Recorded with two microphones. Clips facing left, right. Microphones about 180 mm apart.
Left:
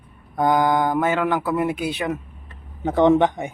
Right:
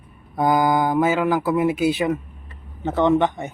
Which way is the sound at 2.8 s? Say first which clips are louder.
Left 2 dB; 15° left (ahead or behind).